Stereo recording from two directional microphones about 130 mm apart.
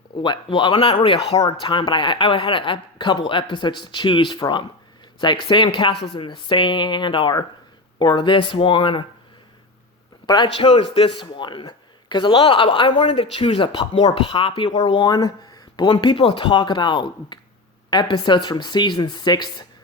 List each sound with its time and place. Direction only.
0.2 s a man's voice: 40° left (ahead or behind)
1.4 s a man's voice: 35° left (ahead or behind)
10.2 s a man's voice: 35° left (ahead or behind)
10.8 s a man's voice: 50° left (ahead or behind)